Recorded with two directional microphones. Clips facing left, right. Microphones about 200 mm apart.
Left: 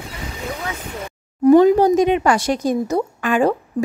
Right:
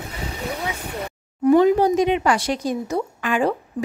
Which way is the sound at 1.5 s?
40° left (ahead or behind).